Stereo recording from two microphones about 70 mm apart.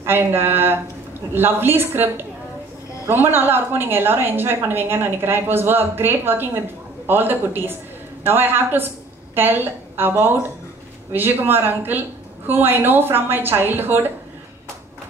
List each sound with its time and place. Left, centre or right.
0.0 s a woman's voice: right